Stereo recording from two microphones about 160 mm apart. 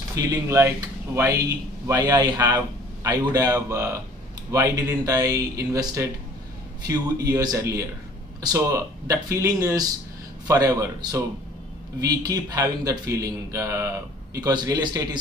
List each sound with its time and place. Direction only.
0.1 s speech: 20° right (ahead or behind)